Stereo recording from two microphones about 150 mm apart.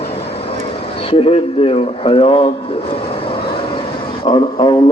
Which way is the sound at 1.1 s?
40° left (ahead or behind).